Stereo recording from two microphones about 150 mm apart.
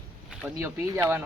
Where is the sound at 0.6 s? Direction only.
20° right (ahead or behind).